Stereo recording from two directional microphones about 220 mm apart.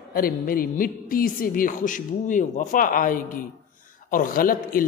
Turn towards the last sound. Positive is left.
turn(degrees=40)  # may be behind; listen again after turning